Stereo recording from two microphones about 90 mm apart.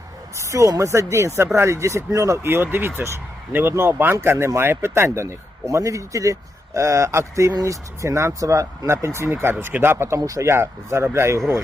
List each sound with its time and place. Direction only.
0.3 s speech: 35° right (ahead or behind)
10.2 s speech: 40° right (ahead or behind)